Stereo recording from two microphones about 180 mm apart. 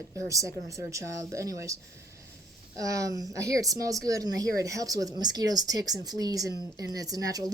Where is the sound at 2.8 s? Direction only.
20° right (ahead or behind).